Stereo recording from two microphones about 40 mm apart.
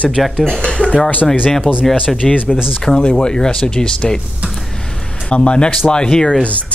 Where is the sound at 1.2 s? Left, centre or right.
Centre.